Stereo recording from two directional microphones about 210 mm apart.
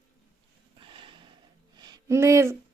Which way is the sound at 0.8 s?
25° right (ahead or behind).